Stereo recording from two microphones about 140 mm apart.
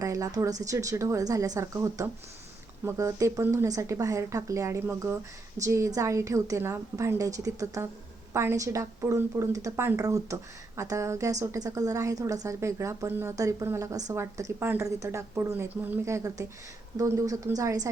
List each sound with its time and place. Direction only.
0.0 s speech: 25° right (ahead or behind)